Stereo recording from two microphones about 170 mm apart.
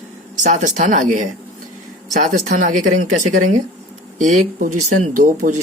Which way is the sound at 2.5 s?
50° right (ahead or behind).